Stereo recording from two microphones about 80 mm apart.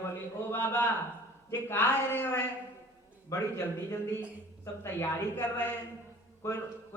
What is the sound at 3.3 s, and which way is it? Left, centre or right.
Mantra, left.